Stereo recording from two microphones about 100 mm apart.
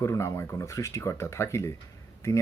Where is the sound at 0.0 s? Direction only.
30° left (ahead or behind).